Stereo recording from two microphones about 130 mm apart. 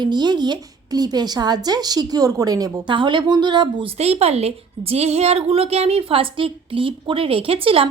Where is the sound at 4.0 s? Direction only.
55° right (ahead or behind).